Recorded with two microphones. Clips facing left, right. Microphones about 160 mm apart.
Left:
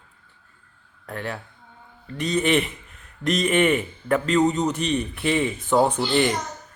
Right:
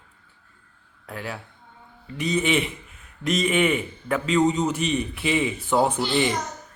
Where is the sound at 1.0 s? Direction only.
5° right (ahead or behind).